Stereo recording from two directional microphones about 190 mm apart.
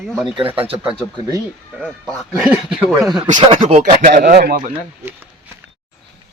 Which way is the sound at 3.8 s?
45° right (ahead or behind).